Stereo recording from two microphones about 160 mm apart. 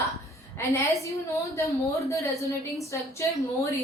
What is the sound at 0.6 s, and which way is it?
A woman's voice, 15° left (ahead or behind).